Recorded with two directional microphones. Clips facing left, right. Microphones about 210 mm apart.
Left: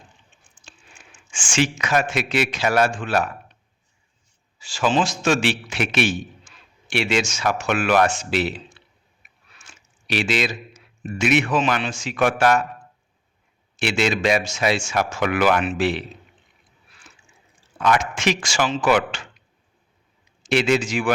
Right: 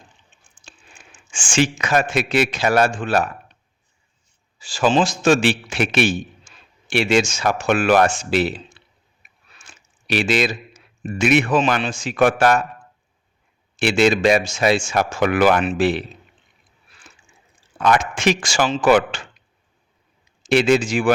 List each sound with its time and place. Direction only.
1.0 s a sound: 30° right (ahead or behind)
1.3 s speech: 30° right (ahead or behind)
4.6 s a man's voice: 35° right (ahead or behind)
10.1 s speech: 50° right (ahead or behind)
11.3 s speech: 35° right (ahead or behind); by 12.6 s 55° right (ahead or behind)
13.9 s speech: 35° right (ahead or behind)
18.3 s speech: 35° right (ahead or behind)
20.7 s speech: 30° right (ahead or behind)